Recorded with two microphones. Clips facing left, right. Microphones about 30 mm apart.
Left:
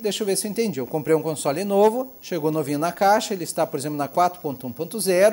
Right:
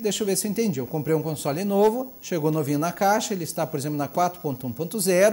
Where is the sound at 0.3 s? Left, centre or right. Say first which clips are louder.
Left 1 dB; left.